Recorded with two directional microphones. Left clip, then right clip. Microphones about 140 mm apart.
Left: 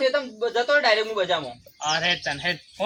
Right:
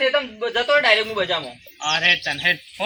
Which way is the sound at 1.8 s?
15° left (ahead or behind).